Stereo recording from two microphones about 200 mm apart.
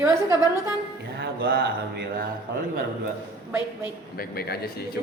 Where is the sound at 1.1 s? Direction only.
55° right (ahead or behind).